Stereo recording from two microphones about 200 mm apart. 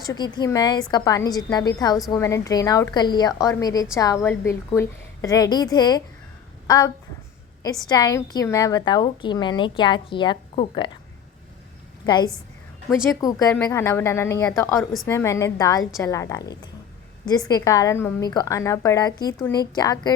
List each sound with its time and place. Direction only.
0.1 s a woman's voice: 20° left (ahead or behind)
12.0 s a woman's voice: 20° left (ahead or behind)
12.9 s a woman's voice: centre (ahead or behind)
13.7 s a woman's voice: 10° left (ahead or behind)